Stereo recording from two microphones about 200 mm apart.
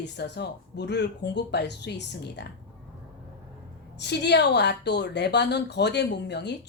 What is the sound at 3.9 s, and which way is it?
A woman's voice, 60° left (ahead or behind).